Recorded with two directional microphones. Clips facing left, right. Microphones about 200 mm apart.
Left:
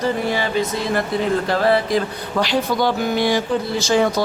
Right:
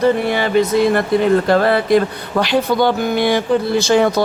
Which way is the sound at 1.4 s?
60° right (ahead or behind).